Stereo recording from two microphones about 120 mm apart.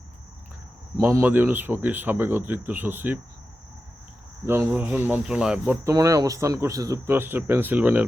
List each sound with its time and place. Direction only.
0.9 s speech: 25° right (ahead or behind)
4.4 s speech: 15° right (ahead or behind)
5.8 s speech: 30° right (ahead or behind); by 8.0 s 15° right (ahead or behind)